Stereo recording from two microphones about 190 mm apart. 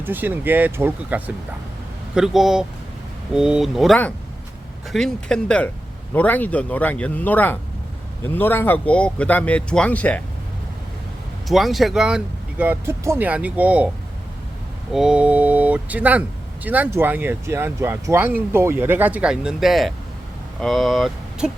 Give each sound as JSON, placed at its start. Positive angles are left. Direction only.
{"t": 0.0, "sound": "speech", "side_deg": -10}
{"t": 11.4, "sound": "speech", "side_deg": 0}
{"t": 14.9, "sound": "speech", "side_deg": -5}